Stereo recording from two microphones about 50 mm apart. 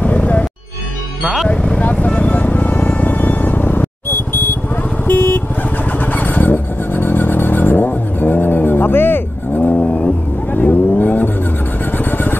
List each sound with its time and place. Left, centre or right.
0.0 s music: left
1.2 s speech: centre
1.5 s vehicle: left
1.9 s music: left
5.0 s vehicle: left
9.6 s vehicle: left